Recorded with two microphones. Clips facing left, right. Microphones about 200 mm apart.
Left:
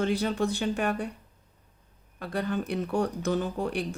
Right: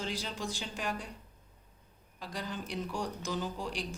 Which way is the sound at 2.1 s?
60° left (ahead or behind).